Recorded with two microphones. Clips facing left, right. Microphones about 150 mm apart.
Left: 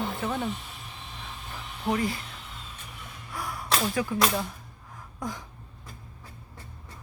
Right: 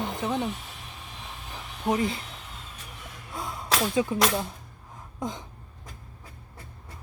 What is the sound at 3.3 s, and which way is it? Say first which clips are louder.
Whip: even; 20° right (ahead or behind).